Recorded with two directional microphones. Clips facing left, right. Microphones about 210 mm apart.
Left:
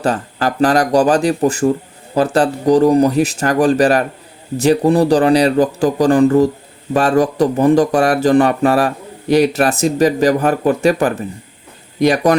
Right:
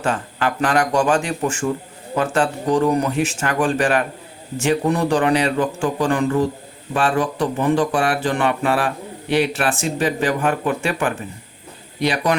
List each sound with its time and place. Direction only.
0.0 s speech: 35° left (ahead or behind)